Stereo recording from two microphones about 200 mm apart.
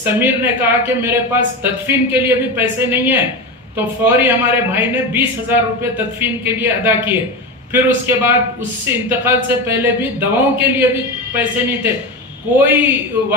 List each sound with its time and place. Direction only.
0.0 s a man's voice: 10° right (ahead or behind)
12.5 s a man's voice: 10° right (ahead or behind)